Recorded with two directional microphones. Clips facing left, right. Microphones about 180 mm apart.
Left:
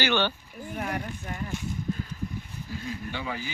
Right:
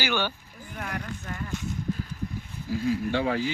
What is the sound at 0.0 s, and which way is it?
Speech, 10° right (ahead or behind).